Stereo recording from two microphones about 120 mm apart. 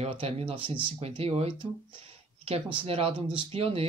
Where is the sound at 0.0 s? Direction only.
55° right (ahead or behind).